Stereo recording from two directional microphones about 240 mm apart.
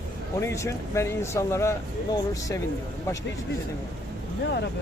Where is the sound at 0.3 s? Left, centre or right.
Centre.